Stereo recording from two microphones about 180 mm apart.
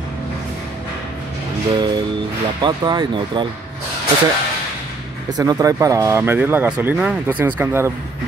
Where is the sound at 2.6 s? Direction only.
25° right (ahead or behind).